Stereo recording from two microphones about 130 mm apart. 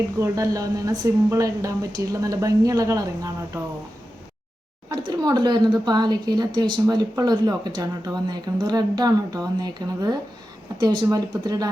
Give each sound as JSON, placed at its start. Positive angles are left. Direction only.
{"t": 0.2, "sound": "speech", "side_deg": -25}
{"t": 4.9, "sound": "speech", "side_deg": -35}